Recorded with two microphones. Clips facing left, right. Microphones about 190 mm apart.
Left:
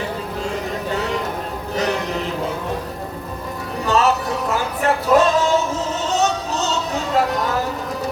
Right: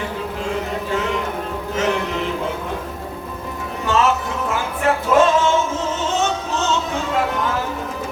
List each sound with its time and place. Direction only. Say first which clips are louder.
1.7 s music: right 1 dB; 35° left (ahead or behind)
3.8 s music: left 1 dB; 40° left (ahead or behind)